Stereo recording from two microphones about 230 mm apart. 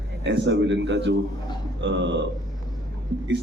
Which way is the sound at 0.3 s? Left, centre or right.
Right.